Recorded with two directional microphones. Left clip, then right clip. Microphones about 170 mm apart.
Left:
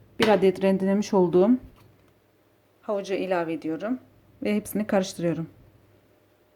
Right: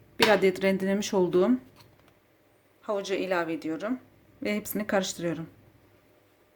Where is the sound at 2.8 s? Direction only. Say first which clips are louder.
Left 2 dB; 15° left (ahead or behind).